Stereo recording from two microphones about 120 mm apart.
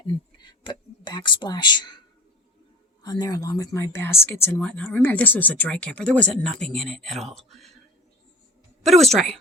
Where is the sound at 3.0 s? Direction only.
30° left (ahead or behind); by 7.7 s centre (ahead or behind).